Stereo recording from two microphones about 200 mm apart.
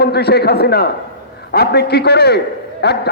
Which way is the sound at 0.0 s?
55° left (ahead or behind).